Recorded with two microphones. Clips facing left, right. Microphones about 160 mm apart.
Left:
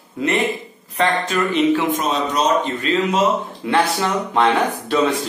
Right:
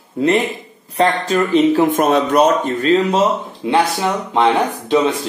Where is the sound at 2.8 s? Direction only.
40° right (ahead or behind).